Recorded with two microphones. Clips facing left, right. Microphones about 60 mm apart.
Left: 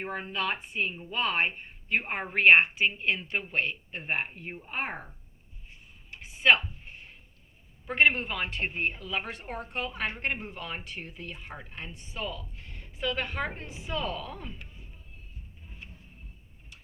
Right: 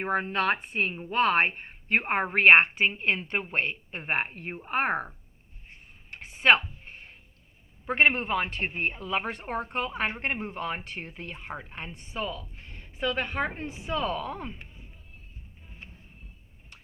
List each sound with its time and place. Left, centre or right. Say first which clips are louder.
0.0 s a woman's voice: right 6 dB; right
5.6 s a sound: right 3 dB; right
7.9 s speech: right 1 dB; right
13.1 s speech: right 3 dB; right
13.7 s speech: right 4 dB; right